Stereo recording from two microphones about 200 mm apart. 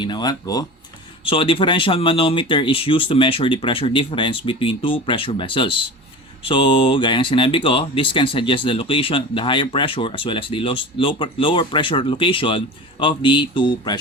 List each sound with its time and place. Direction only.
0.0 s speech: 20° left (ahead or behind)